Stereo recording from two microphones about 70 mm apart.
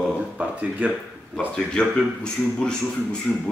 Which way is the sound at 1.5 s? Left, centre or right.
Centre.